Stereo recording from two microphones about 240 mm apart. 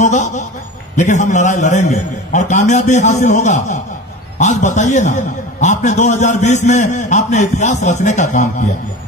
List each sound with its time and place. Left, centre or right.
0.0 s a man's voice: left